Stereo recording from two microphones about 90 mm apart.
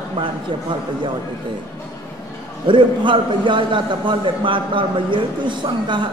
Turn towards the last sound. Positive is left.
turn(degrees=-65)  # may be behind; listen again after turning